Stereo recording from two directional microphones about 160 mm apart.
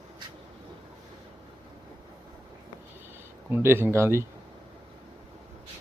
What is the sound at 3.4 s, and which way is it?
Speech, 15° right (ahead or behind).